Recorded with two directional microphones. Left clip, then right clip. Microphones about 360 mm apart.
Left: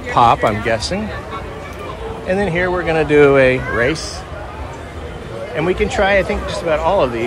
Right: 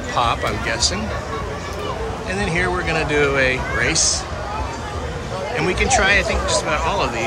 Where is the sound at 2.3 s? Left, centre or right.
Centre.